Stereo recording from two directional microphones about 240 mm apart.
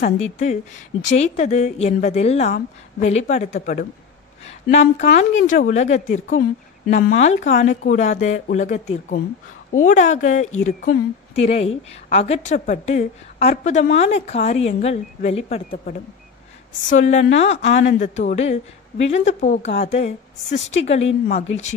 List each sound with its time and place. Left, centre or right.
0.0 s a woman's voice: left
11.3 s a woman's voice: left
15.7 s a woman's voice: left